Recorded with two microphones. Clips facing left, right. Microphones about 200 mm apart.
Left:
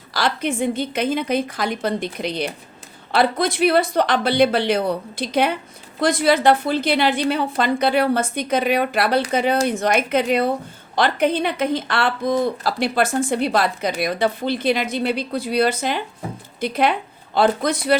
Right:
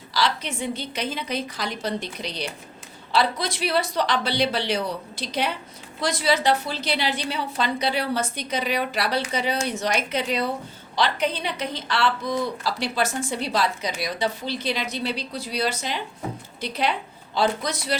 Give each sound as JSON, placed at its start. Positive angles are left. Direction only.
{"t": 0.1, "sound": "a woman's voice", "side_deg": 50}